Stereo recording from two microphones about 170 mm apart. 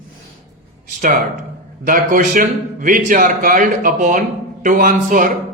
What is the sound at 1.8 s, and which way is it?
A man's voice, 50° right (ahead or behind).